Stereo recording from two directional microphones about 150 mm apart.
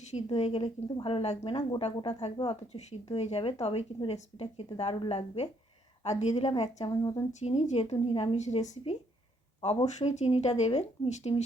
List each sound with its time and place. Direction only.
0.1 s speech: 45° left (ahead or behind)
1.5 s speech: 30° left (ahead or behind); by 6.3 s 50° left (ahead or behind)
6.3 s speech: 35° left (ahead or behind)
6.8 s a woman's voice: 30° left (ahead or behind)
7.3 s speech: 50° left (ahead or behind)